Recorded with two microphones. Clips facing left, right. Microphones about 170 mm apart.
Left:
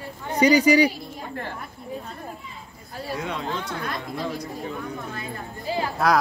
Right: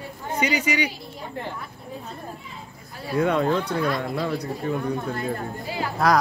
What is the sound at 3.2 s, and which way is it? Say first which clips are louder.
Speech: right 12 dB; 55° right (ahead or behind).